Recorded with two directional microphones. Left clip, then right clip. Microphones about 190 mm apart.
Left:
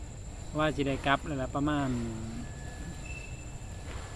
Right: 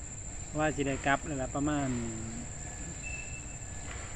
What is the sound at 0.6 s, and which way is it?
Speech, 5° left (ahead or behind).